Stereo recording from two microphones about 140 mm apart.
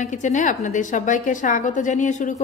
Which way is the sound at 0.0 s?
60° left (ahead or behind).